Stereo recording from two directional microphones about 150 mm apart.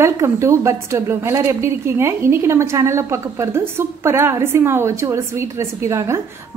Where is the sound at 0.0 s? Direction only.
20° right (ahead or behind).